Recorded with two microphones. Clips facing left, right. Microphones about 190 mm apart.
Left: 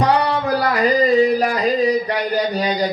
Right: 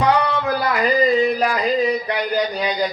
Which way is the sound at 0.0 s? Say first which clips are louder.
Left 1 dB; 35° left (ahead or behind).